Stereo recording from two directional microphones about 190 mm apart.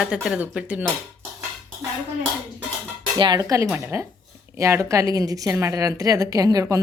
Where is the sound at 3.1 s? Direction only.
20° right (ahead or behind).